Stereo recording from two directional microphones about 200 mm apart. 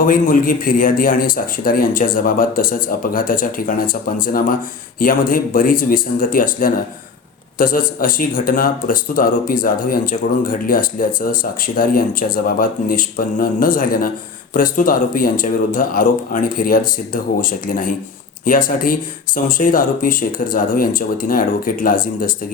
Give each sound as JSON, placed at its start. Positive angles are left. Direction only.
{"t": 0.0, "sound": "speech", "side_deg": 45}